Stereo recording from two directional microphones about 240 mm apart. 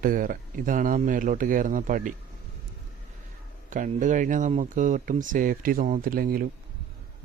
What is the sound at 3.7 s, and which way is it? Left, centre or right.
A man's voice, right.